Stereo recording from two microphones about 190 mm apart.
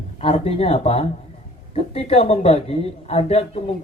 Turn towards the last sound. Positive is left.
turn(degrees=30)  # may be behind; listen again after turning